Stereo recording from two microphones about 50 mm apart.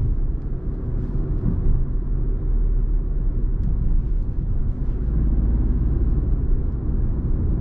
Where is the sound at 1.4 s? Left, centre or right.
Left.